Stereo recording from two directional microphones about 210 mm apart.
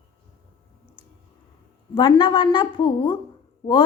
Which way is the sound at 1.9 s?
20° left (ahead or behind).